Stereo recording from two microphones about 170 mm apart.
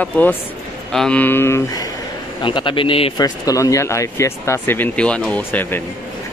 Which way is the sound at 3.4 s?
20° left (ahead or behind).